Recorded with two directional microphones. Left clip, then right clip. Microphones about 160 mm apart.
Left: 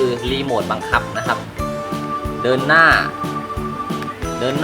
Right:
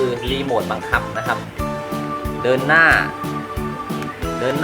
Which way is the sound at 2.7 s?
20° left (ahead or behind).